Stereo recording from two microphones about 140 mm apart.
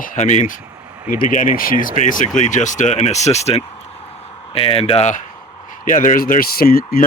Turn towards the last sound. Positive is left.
turn(degrees=90)